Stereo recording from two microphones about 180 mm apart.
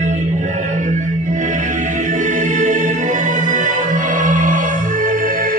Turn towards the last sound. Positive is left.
turn(degrees=-45)  # may be behind; listen again after turning